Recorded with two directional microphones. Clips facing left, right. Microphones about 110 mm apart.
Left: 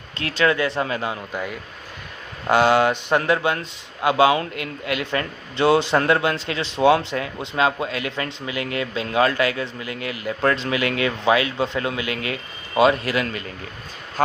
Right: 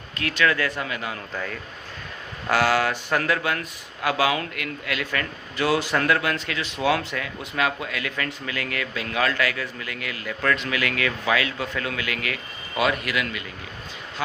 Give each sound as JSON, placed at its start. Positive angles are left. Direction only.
{"t": 0.2, "sound": "speech", "side_deg": 30}
{"t": 1.3, "sound": "a man's voice", "side_deg": 15}